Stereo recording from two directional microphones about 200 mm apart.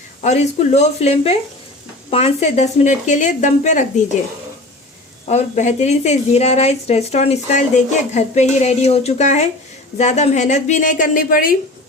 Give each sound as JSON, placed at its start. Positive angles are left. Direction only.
{"t": 0.2, "sound": "a woman's voice", "side_deg": 35}
{"t": 5.3, "sound": "a woman's voice", "side_deg": 35}